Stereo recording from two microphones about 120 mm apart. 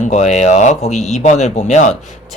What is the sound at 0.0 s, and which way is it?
Speech, 75° left (ahead or behind).